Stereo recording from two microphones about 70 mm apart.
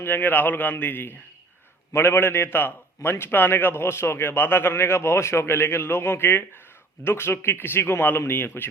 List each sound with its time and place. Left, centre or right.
0.0 s a man's voice: left